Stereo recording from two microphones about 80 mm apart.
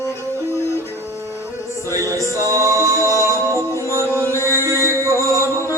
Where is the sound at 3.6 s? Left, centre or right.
Right.